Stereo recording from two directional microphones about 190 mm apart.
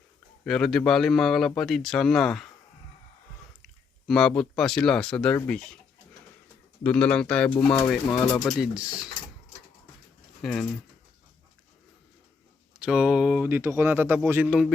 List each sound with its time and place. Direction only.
0.4 s a man's voice: 5° left (ahead or behind)
3.6 s speech: 5° left (ahead or behind)
6.8 s a man's voice: 5° left (ahead or behind)
8.1 s speech: 20° left (ahead or behind)
8.4 s a man's voice: centre (ahead or behind)
10.4 s a man's voice: 5° left (ahead or behind)
12.8 s speech: 5° right (ahead or behind)